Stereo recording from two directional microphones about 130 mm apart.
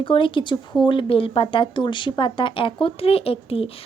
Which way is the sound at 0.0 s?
40° left (ahead or behind).